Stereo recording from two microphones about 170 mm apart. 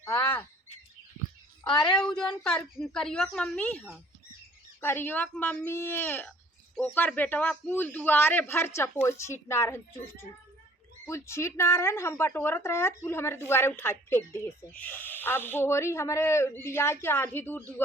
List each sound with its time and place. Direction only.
0.2 s bird: 10° left (ahead or behind)
1.6 s a woman's voice: 25° left (ahead or behind)
2.0 s speech: 5° left (ahead or behind)
4.8 s speech: 15° left (ahead or behind)